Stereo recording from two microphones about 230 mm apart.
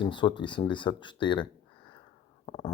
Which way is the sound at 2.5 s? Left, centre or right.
Centre.